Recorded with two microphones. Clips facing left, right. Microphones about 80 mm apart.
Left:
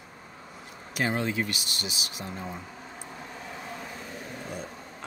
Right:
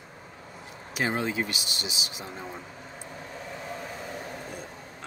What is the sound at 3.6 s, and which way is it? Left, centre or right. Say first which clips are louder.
Vehicle: right 3 dB; centre.